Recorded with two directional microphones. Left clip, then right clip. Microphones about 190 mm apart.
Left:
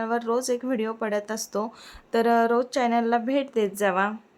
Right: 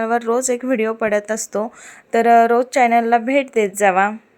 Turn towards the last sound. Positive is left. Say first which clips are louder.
# right 9 dB
turn(degrees=-20)  # may be behind; listen again after turning